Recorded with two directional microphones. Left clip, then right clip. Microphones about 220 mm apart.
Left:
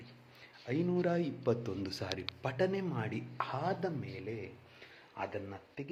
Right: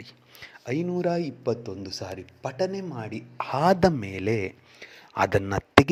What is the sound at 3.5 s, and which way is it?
A man's voice, 45° right (ahead or behind).